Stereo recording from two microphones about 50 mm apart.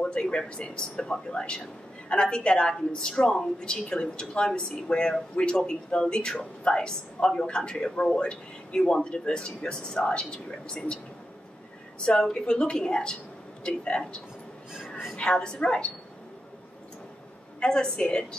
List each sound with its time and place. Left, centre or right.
0.0 s speech: centre
12.0 s speech: centre
17.6 s speech: centre